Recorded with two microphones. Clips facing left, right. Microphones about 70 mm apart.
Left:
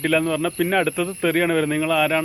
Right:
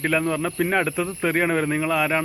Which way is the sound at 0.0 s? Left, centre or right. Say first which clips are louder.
Left 2 dB; centre.